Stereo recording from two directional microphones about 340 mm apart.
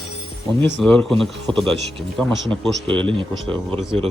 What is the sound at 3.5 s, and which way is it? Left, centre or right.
Speech, centre.